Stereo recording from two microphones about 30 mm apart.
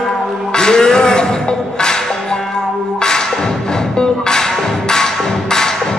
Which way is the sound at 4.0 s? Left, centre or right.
Left.